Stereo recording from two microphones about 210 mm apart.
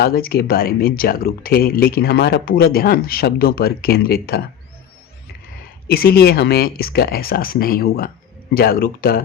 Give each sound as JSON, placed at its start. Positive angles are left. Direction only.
{"t": 0.0, "sound": "speech", "side_deg": 45}
{"t": 5.9, "sound": "speech", "side_deg": 45}